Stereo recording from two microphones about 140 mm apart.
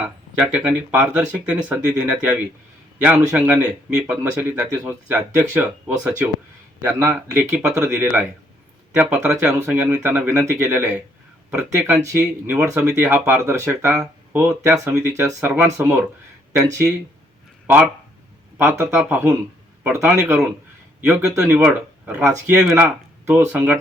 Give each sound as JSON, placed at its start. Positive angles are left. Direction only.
{"t": 0.0, "sound": "speech", "side_deg": -10}
{"t": 18.5, "sound": "speech", "side_deg": -15}